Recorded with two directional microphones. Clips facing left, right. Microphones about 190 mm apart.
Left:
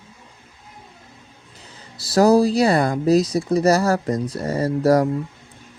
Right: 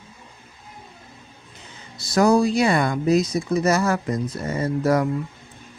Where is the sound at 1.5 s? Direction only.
35° left (ahead or behind).